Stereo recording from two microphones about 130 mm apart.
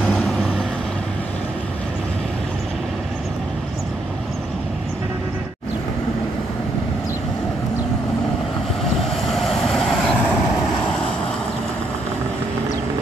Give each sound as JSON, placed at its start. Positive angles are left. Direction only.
{"t": 0.0, "sound": "vehicle", "side_deg": 5}
{"t": 9.1, "sound": "vehicle", "side_deg": 0}